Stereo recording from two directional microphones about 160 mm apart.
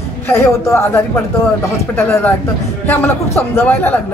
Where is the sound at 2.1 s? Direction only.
15° left (ahead or behind).